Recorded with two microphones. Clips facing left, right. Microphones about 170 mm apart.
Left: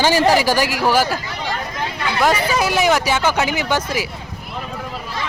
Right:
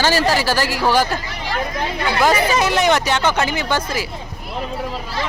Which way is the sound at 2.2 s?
5° left (ahead or behind).